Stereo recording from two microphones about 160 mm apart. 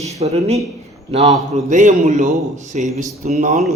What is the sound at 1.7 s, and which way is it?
Mantra, 50° right (ahead or behind).